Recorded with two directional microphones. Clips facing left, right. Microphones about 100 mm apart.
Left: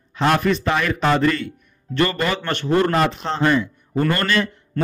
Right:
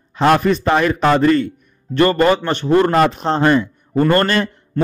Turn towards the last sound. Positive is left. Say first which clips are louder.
# right 5 dB
turn(degrees=-40)  # may be behind; listen again after turning